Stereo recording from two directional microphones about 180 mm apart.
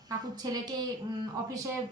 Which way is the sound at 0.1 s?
20° right (ahead or behind).